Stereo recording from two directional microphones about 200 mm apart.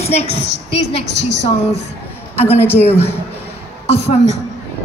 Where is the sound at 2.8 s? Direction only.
30° left (ahead or behind).